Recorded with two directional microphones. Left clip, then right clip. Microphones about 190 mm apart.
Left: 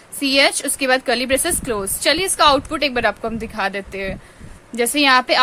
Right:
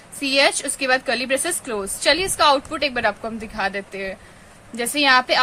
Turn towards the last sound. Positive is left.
turn(degrees=35)  # may be behind; listen again after turning